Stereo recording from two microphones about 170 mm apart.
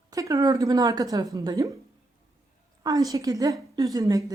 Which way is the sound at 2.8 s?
20° right (ahead or behind).